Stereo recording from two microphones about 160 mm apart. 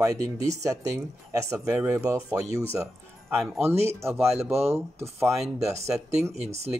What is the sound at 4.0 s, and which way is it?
Speech, 15° right (ahead or behind).